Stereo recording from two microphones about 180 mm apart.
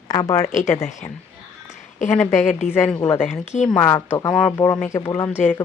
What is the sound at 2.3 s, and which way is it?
Speech, 40° left (ahead or behind).